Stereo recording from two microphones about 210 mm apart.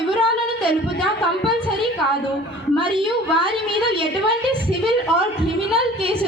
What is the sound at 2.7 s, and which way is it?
A woman's voice, 25° right (ahead or behind).